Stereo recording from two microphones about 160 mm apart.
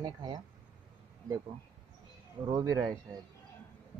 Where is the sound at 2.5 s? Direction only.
25° right (ahead or behind).